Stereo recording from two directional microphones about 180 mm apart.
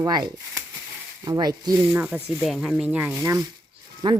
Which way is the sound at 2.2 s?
5° right (ahead or behind).